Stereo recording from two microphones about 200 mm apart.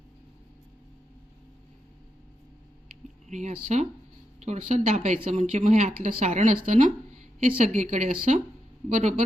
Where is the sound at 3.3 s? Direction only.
35° right (ahead or behind).